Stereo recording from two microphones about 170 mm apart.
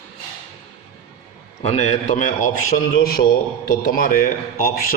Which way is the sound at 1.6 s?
40° left (ahead or behind).